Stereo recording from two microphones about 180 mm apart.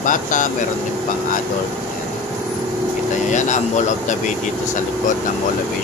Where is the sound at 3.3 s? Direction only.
45° left (ahead or behind).